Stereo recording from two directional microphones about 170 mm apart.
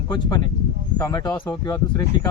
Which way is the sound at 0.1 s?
25° left (ahead or behind).